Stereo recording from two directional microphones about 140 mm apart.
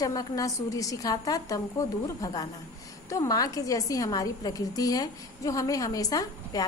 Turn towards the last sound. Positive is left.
turn(degrees=25)  # may be behind; listen again after turning